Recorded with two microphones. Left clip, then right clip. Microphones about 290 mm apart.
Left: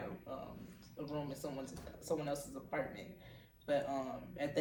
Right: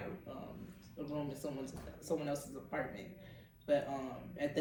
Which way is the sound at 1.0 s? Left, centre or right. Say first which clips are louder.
Right 1 dB; centre.